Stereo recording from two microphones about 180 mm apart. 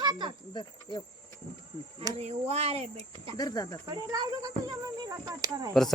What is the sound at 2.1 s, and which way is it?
Speech, 35° right (ahead or behind).